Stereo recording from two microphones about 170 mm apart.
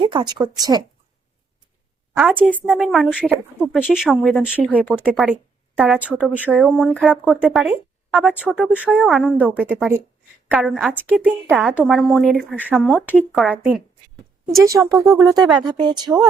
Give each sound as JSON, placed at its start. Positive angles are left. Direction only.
{"t": 0.0, "sound": "speech", "side_deg": -30}
{"t": 2.1, "sound": "a woman's voice", "side_deg": -10}
{"t": 3.6, "sound": "speech", "side_deg": 10}
{"t": 3.8, "sound": "a woman's voice", "side_deg": -5}
{"t": 15.1, "sound": "speech", "side_deg": -20}